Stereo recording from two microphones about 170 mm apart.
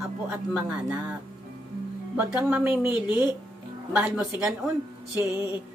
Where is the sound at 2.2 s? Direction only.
5° right (ahead or behind).